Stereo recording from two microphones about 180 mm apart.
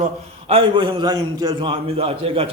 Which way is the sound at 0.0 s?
35° right (ahead or behind).